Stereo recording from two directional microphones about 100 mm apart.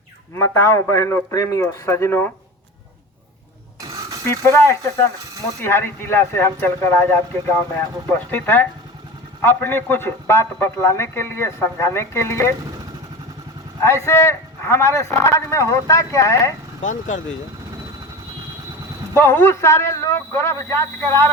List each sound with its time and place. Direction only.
0.3 s a man's voice: 25° left (ahead or behind)
3.8 s a sound: 35° right (ahead or behind)
4.3 s a man's voice: 25° left (ahead or behind)
13.8 s a man's voice: 25° left (ahead or behind)
19.1 s a man's voice: 25° left (ahead or behind)